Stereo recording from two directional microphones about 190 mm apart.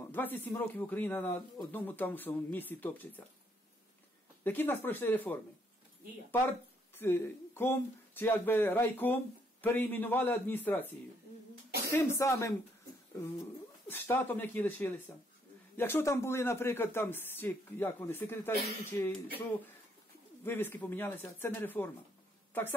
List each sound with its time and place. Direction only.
0.1 s speech: 10° left (ahead or behind)
4.5 s speech: 10° left (ahead or behind)
7.0 s speech: 10° left (ahead or behind)
11.9 s speech: 15° left (ahead or behind)
13.8 s speech: 10° left (ahead or behind)
20.4 s a woman's voice: 10° left (ahead or behind)